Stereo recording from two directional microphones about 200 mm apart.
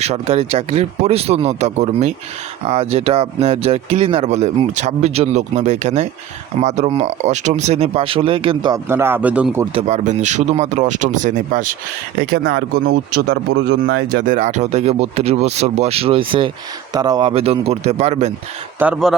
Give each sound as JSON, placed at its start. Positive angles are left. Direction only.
{"t": 0.0, "sound": "speech", "side_deg": -30}
{"t": 9.7, "sound": "speech", "side_deg": -35}
{"t": 12.2, "sound": "speech", "side_deg": -50}
{"t": 14.2, "sound": "speech", "side_deg": -40}
{"t": 18.8, "sound": "speech", "side_deg": -5}